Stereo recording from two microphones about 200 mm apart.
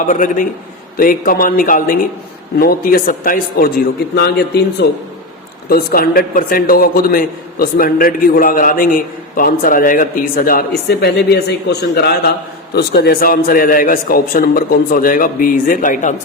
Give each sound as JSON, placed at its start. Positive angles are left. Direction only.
{"t": 0.1, "sound": "a man's voice", "side_deg": 40}